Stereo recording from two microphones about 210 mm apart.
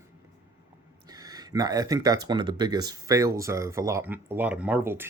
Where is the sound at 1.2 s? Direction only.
15° right (ahead or behind).